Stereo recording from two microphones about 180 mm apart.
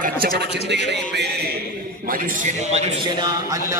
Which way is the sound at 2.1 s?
40° right (ahead or behind).